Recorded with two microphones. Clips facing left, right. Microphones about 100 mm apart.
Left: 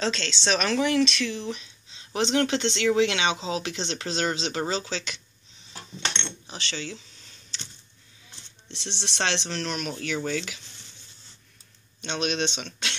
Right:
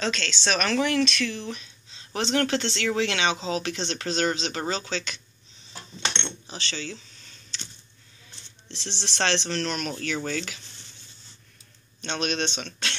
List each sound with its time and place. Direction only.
0.0 s speech: 25° left (ahead or behind)
6.4 s speech: 15° left (ahead or behind)
8.6 s speech: 15° left (ahead or behind)
12.0 s speech: 15° left (ahead or behind)